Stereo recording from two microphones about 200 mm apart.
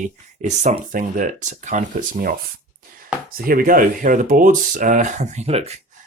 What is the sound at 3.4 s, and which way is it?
Speech, 45° right (ahead or behind).